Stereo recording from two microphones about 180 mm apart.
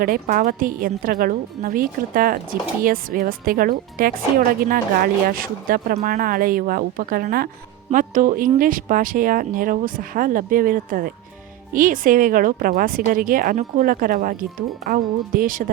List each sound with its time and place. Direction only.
0.0 s a woman's voice: 50° right (ahead or behind)